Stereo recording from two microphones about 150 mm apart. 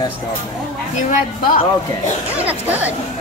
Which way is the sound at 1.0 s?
65° left (ahead or behind).